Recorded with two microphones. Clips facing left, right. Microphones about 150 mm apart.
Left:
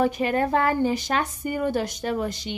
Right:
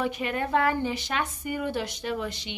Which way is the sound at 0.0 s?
40° left (ahead or behind).